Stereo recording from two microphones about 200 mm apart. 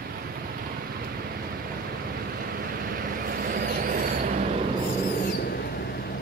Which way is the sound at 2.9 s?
45° right (ahead or behind).